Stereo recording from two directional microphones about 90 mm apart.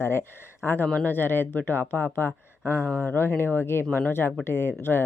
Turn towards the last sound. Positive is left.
turn(degrees=25)  # may be behind; listen again after turning